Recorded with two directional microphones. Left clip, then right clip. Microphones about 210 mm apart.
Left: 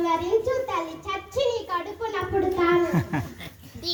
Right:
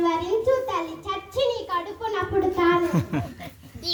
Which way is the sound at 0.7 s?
15° right (ahead or behind).